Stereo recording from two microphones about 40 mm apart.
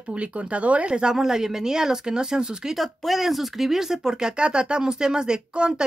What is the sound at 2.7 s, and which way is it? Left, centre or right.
Speech, centre.